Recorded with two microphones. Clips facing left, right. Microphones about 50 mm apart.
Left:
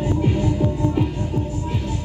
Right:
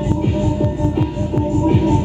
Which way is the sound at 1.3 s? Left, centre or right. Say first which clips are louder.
Right 10 dB; right.